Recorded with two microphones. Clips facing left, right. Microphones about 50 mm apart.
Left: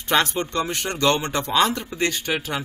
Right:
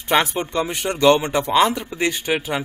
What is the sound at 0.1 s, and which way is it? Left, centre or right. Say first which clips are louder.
Speech: right 2 dB; centre.